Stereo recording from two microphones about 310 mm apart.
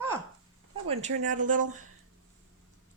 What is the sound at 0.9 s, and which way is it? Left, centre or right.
Speech, right.